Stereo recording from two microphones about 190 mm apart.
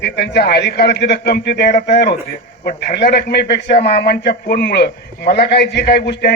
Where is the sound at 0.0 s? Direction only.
60° left (ahead or behind).